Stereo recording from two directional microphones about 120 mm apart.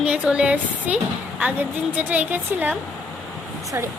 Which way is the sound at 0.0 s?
10° right (ahead or behind).